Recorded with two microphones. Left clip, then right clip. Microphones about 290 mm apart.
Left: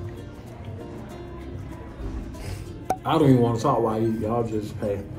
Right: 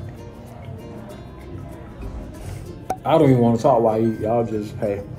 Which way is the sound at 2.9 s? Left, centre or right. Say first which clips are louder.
Right 4 dB; centre.